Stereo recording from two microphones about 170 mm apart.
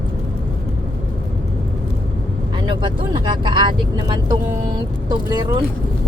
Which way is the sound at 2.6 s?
25° right (ahead or behind).